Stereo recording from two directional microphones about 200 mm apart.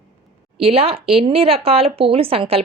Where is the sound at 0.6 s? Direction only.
30° right (ahead or behind).